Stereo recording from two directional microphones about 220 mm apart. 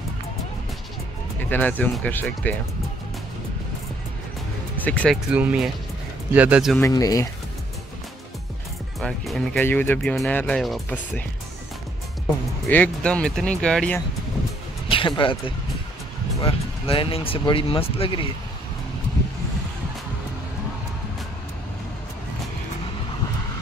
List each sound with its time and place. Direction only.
1.5 s speech: 10° left (ahead or behind)
4.8 s speech: 5° left (ahead or behind)
5.3 s speech: 5° right (ahead or behind)
6.8 s speech: 15° left (ahead or behind)
9.0 s speech: centre (ahead or behind)
12.6 s speech: 5° left (ahead or behind)
14.9 s speech: 25° left (ahead or behind)